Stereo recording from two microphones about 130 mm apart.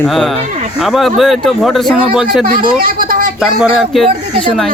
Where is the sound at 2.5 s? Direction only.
90° right.